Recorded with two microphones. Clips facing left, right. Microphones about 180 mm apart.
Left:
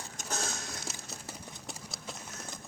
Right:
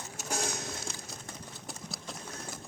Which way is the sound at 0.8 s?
5° left (ahead or behind).